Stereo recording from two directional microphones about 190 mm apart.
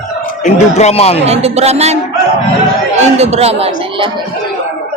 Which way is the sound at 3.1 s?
35° right (ahead or behind).